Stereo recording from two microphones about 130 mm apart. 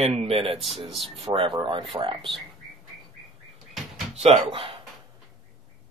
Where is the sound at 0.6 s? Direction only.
Centre (ahead or behind).